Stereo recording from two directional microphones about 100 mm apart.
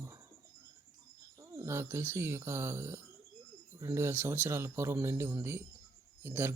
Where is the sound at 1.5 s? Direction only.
25° right (ahead or behind).